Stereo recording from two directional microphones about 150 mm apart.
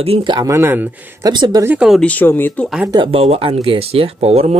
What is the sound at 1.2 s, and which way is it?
Speech, 30° right (ahead or behind).